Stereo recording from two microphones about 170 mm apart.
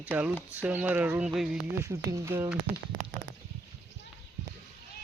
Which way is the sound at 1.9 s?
15° right (ahead or behind).